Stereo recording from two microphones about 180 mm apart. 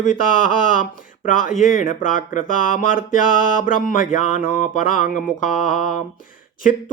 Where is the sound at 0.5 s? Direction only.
50° left (ahead or behind).